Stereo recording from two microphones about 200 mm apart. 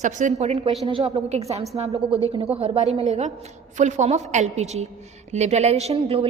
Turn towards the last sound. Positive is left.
turn(degrees=-30)  # may be behind; listen again after turning